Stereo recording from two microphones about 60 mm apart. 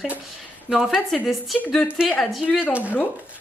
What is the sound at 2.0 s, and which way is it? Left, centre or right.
Speech, centre.